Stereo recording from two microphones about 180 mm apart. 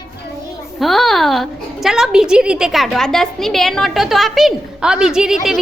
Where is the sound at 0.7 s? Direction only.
Centre (ahead or behind).